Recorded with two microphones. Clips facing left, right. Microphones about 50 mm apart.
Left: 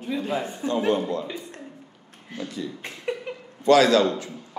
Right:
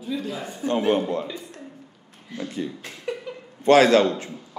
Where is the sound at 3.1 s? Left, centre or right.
Left.